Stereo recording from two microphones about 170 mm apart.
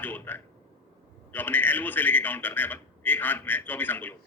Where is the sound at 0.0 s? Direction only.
10° left (ahead or behind).